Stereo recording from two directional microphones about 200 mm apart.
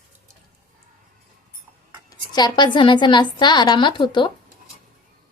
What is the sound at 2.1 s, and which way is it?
A woman's voice, 20° left (ahead or behind).